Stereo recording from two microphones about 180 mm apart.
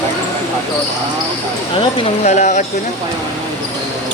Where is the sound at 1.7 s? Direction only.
30° left (ahead or behind).